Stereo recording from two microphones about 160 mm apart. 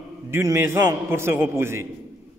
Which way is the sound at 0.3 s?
15° right (ahead or behind).